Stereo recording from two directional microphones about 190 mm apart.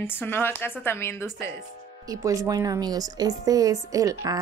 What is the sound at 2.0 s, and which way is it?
A woman's voice, 15° right (ahead or behind).